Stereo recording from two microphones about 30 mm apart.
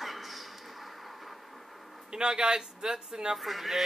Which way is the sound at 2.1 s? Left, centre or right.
Right.